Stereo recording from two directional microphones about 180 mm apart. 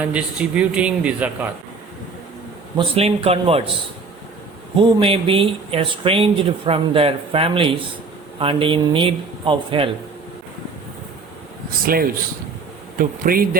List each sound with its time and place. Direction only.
0.0 s a man's voice: 5° right (ahead or behind)
2.7 s speech: 30° right (ahead or behind)
4.8 s speech: 30° right (ahead or behind)
13.0 s speech: 50° right (ahead or behind)